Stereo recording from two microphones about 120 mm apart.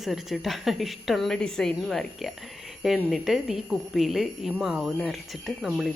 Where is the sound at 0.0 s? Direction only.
Centre (ahead or behind).